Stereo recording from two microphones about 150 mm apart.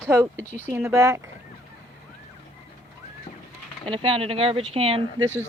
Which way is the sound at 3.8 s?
35° right (ahead or behind).